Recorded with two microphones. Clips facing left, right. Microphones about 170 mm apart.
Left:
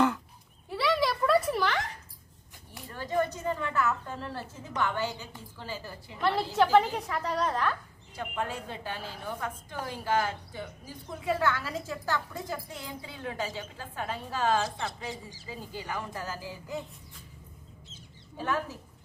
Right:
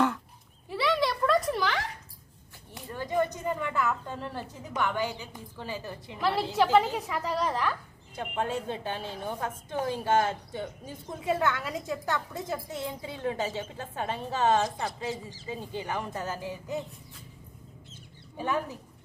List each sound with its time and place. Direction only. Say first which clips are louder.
0.7 s a sound: even; centre (ahead or behind)
2.7 s a woman's voice: right 1 dB; 15° right (ahead or behind)
6.1 s a woman's voice: even; 5° right (ahead or behind)
8.1 s a woman's voice: right 3 dB; 25° right (ahead or behind)
18.3 s speech: right 1 dB; 15° right (ahead or behind)